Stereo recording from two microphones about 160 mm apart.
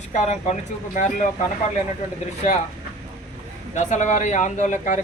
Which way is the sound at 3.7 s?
50° left (ahead or behind).